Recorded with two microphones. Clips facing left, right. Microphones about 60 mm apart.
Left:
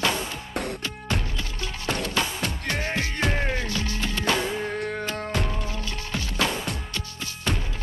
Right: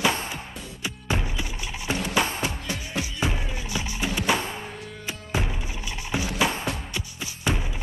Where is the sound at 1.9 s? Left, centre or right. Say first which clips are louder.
Right 2 dB; centre.